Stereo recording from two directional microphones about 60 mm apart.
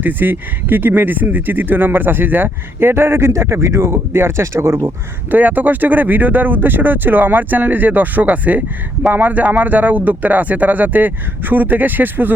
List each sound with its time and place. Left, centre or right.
0.0 s speech: right
5.3 s speech: right